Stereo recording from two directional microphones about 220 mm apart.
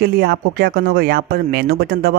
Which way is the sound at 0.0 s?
45° right (ahead or behind).